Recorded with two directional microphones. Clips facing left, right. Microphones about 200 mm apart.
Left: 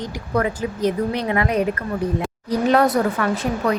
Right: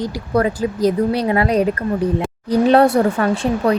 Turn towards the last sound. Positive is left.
turn(degrees=-30)  # may be behind; listen again after turning